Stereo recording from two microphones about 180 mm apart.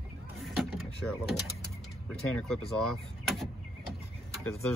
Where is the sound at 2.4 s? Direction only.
5° left (ahead or behind).